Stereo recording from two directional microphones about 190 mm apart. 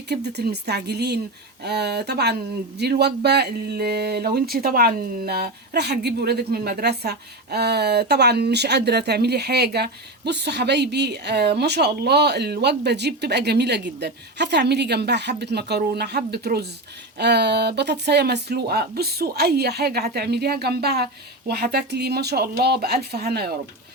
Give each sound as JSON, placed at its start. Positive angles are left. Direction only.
{"t": 0.1, "sound": "speech", "side_deg": -60}